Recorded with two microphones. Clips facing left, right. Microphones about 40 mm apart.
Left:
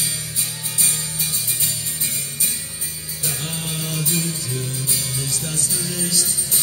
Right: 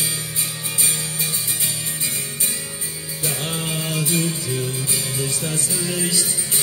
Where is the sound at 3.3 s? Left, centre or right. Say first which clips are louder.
Right 3 dB; right.